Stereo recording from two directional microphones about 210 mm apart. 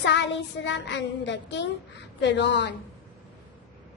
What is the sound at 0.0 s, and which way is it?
Child singing, 55° left (ahead or behind).